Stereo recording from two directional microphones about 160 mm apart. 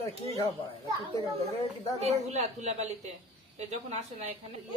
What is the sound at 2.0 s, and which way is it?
Speech, 45° right (ahead or behind).